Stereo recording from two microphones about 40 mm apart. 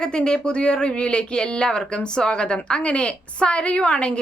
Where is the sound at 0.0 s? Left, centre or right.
Left.